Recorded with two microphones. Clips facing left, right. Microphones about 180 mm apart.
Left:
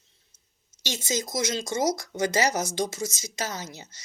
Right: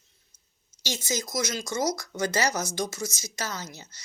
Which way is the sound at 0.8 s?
20° left (ahead or behind).